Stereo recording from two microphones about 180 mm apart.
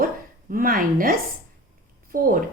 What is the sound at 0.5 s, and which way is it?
Speech, 50° right (ahead or behind).